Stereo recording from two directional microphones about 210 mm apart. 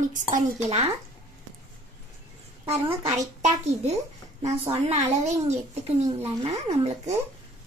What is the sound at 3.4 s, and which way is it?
A child's voice, 35° right (ahead or behind).